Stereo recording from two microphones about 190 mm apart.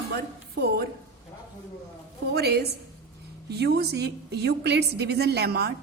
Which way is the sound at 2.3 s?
60° right (ahead or behind).